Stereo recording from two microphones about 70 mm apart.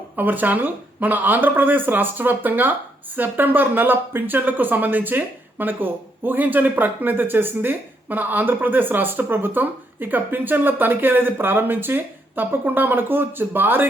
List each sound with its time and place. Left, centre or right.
0.2 s speech: right